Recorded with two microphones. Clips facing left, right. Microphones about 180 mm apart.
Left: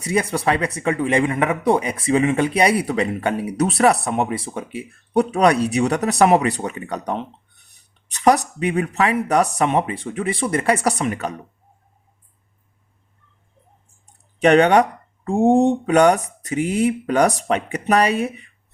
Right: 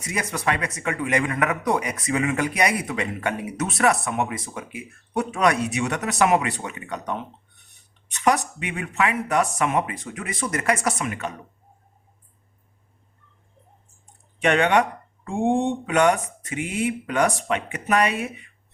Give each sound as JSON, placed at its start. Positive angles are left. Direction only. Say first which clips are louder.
{"t": 0.0, "sound": "speech", "louder": "left 6 dB", "side_deg": 30}
{"t": 14.3, "sound": "speech", "louder": "left 6 dB", "side_deg": 35}